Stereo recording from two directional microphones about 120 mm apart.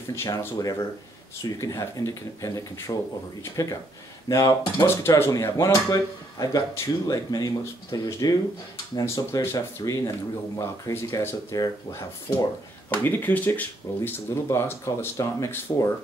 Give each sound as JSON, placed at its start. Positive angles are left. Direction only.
{"t": 0.1, "sound": "speech", "side_deg": 20}
{"t": 12.9, "sound": "speech", "side_deg": 15}